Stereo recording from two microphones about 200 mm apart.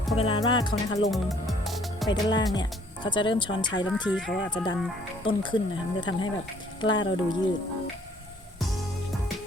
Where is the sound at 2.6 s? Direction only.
20° left (ahead or behind).